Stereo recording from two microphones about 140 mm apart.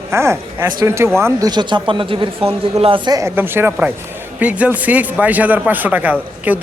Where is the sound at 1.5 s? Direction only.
30° right (ahead or behind).